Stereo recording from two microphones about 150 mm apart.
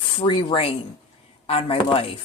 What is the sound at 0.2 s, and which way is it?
Speech, 35° left (ahead or behind).